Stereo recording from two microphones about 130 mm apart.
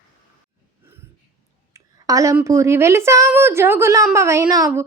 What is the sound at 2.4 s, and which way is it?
A woman's voice, 25° right (ahead or behind).